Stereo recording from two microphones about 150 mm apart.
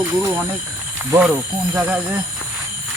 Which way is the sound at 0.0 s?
15° right (ahead or behind).